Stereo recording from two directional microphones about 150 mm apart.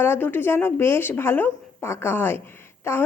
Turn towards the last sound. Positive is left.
turn(degrees=15)  # may be behind; listen again after turning